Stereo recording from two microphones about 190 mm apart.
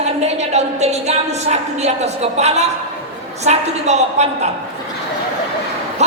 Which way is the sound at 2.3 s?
35° right (ahead or behind).